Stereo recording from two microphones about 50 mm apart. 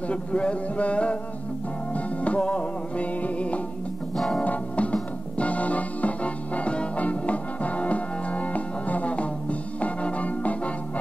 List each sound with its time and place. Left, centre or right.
0.1 s speech: left
2.0 s music: left